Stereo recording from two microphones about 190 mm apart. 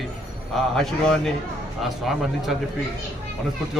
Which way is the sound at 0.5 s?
Centre (ahead or behind).